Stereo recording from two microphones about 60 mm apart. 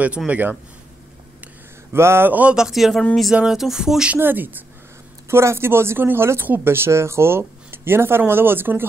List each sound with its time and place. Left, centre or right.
0.3 s speech: right
1.9 s a sound: right
2.2 s speech: right
2.5 s a man's voice: centre
4.2 s speech: right
5.3 s speech: right